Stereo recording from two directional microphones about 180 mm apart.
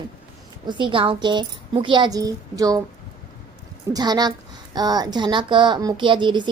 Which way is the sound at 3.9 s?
20° right (ahead or behind).